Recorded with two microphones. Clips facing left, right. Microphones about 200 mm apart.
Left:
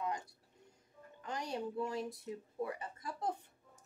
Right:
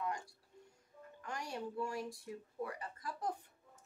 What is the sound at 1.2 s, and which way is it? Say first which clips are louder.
Speech: left 3 dB; 20° left (ahead or behind).